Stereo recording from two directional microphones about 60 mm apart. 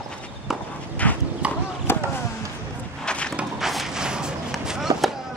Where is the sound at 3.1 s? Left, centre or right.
Centre.